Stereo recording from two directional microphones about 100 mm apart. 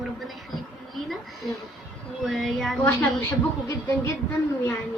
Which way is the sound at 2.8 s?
25° left (ahead or behind).